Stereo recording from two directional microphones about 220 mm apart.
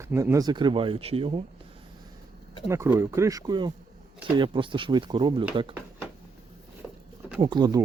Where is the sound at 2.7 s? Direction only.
10° right (ahead or behind).